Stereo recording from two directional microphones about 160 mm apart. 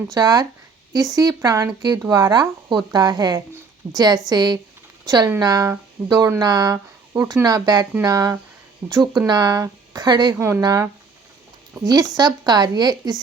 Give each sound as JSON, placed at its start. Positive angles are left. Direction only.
{"t": 0.1, "sound": "speech", "side_deg": -25}
{"t": 8.8, "sound": "a woman's voice", "side_deg": -10}
{"t": 9.1, "sound": "speech", "side_deg": -25}
{"t": 10.3, "sound": "a woman's voice", "side_deg": -15}
{"t": 11.9, "sound": "speech", "side_deg": -25}